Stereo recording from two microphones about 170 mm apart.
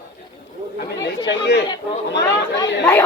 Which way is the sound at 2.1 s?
90° left.